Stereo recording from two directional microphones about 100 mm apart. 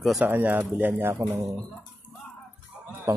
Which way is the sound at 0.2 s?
15° right (ahead or behind).